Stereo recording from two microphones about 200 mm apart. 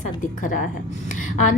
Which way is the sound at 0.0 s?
40° left (ahead or behind).